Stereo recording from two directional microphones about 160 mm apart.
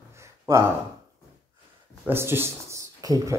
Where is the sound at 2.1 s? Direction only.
15° right (ahead or behind).